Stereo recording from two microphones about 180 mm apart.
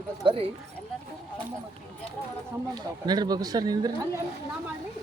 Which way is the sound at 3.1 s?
20° right (ahead or behind).